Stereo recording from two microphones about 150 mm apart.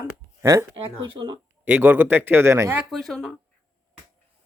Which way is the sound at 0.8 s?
35° right (ahead or behind).